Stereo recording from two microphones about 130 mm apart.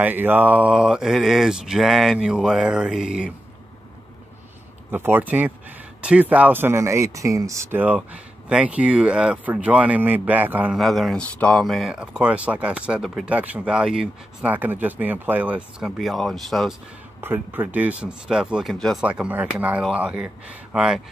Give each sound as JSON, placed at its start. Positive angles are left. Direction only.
{"t": 0.0, "sound": "speech", "side_deg": -15}
{"t": 4.9, "sound": "speech", "side_deg": -15}
{"t": 10.8, "sound": "speech", "side_deg": 0}
{"t": 17.2, "sound": "speech", "side_deg": -15}
{"t": 19.0, "sound": "speech", "side_deg": -10}